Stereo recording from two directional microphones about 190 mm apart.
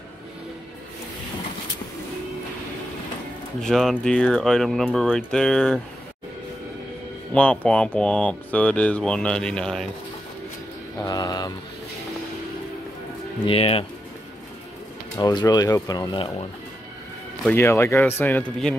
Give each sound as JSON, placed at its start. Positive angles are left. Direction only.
{"t": 3.6, "sound": "speech", "side_deg": 0}
{"t": 7.3, "sound": "speech", "side_deg": 5}
{"t": 11.0, "sound": "speech", "side_deg": 20}
{"t": 13.5, "sound": "speech", "side_deg": 30}
{"t": 15.1, "sound": "speech", "side_deg": 20}
{"t": 17.5, "sound": "speech", "side_deg": 15}